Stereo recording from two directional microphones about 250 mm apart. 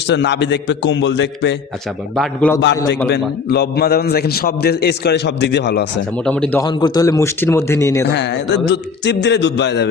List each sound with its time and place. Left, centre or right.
0.1 s speech: left
2.1 s a man's voice: centre
3.1 s a man's voice: left
6.2 s a man's voice: centre
8.0 s speech: left